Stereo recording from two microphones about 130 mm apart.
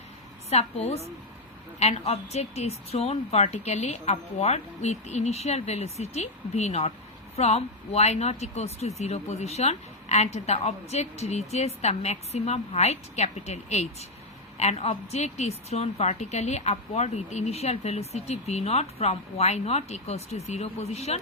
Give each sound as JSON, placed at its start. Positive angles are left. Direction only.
{"t": 0.5, "sound": "a woman's voice", "side_deg": 55}